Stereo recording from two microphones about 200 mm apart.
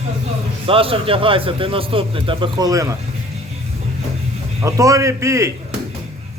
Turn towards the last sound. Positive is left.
turn(degrees=-15)  # may be behind; listen again after turning